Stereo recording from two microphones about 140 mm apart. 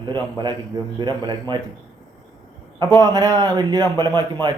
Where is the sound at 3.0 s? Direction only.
25° right (ahead or behind).